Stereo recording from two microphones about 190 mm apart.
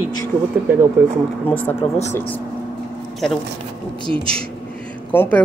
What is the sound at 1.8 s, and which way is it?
Speech, 35° left (ahead or behind).